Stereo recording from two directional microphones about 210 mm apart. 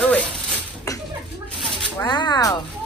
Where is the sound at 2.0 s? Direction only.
20° left (ahead or behind).